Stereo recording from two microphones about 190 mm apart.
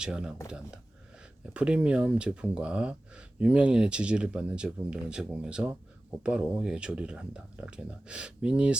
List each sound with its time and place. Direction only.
0.0 s speech: 5° right (ahead or behind)